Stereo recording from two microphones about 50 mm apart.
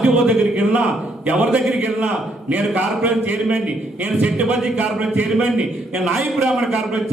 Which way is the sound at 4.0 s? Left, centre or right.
Right.